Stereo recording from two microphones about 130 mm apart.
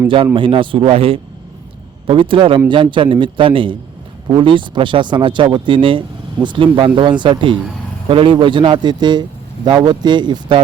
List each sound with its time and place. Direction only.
0.3 s a man's voice: 40° right (ahead or behind)